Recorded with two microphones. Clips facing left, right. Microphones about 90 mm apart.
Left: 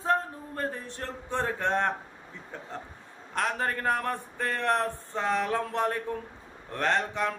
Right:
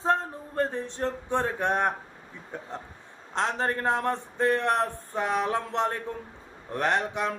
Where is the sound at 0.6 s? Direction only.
20° right (ahead or behind).